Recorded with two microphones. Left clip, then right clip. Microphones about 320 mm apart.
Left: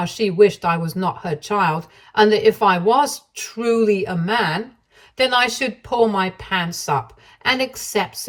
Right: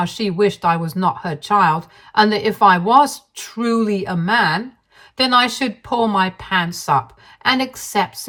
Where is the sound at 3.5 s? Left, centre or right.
Centre.